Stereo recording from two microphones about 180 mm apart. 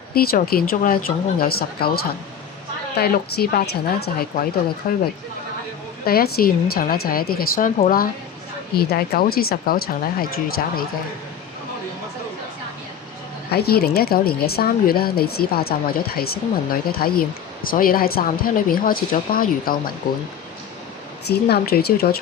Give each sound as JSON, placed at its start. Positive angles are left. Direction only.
{"t": 0.1, "sound": "speech", "side_deg": 55}
{"t": 6.1, "sound": "speech", "side_deg": 55}
{"t": 13.5, "sound": "speech", "side_deg": 60}
{"t": 21.2, "sound": "speech", "side_deg": 65}